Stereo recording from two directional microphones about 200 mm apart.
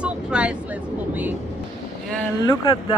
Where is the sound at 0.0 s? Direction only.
5° right (ahead or behind).